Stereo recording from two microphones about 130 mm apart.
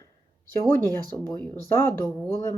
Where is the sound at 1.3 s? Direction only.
15° left (ahead or behind).